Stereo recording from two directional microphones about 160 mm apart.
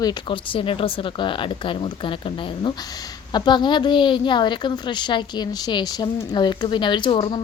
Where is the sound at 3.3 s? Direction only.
30° left (ahead or behind).